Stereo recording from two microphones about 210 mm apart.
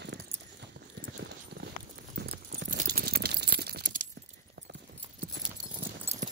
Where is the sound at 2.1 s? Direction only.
50° right (ahead or behind).